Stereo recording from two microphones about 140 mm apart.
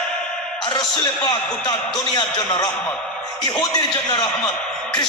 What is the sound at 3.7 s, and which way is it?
Speech, 30° left (ahead or behind).